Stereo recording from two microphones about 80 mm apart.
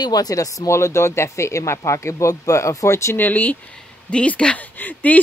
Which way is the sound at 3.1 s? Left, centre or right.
Left.